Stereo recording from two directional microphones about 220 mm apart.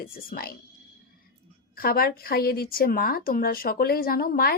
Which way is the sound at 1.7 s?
45° left (ahead or behind).